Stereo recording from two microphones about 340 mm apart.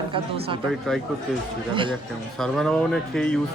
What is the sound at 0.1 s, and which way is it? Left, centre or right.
Speech, centre.